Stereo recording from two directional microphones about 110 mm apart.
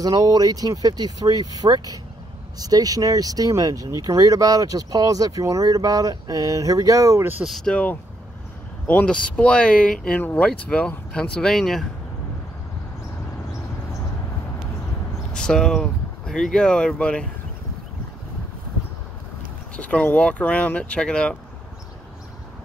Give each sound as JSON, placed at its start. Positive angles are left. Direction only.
{"t": 0.0, "sound": "speech", "side_deg": -35}
{"t": 7.4, "sound": "speech", "side_deg": 0}
{"t": 7.7, "sound": "speech", "side_deg": 15}
{"t": 15.3, "sound": "speech", "side_deg": 5}
{"t": 19.8, "sound": "speech", "side_deg": 10}